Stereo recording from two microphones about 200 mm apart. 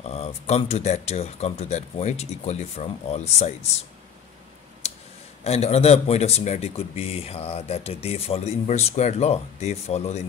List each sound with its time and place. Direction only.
0.0 s speech: 30° left (ahead or behind)
5.4 s speech: 30° left (ahead or behind)